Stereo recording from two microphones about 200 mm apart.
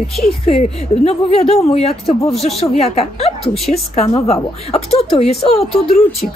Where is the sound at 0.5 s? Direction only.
30° left (ahead or behind).